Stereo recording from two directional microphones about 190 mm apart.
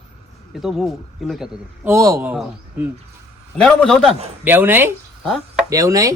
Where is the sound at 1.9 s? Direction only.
15° right (ahead or behind).